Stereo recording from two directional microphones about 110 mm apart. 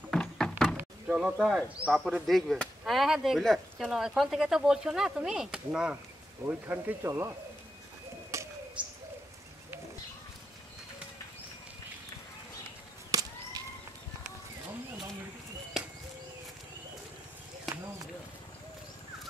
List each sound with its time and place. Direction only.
0.1 s door: 5° left (ahead or behind)
1.0 s speech: 10° right (ahead or behind)
6.4 s speech: 20° right (ahead or behind)
8.3 s bird: 25° right (ahead or behind)
8.8 s bird: 10° right (ahead or behind)
13.1 s a sound: 30° right (ahead or behind)